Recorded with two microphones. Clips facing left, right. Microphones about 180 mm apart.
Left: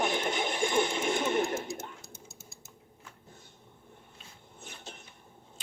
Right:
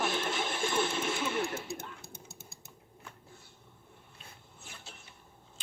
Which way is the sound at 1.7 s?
60° right (ahead or behind).